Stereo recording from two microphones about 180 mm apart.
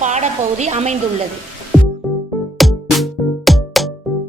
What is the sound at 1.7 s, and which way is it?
Music, 5° right (ahead or behind).